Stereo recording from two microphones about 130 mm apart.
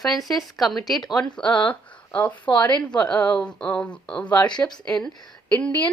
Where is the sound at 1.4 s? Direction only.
35° left (ahead or behind).